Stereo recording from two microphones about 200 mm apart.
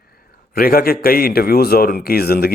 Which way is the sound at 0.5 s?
50° left (ahead or behind).